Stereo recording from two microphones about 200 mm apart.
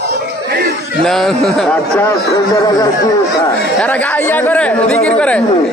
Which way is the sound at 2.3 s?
15° left (ahead or behind).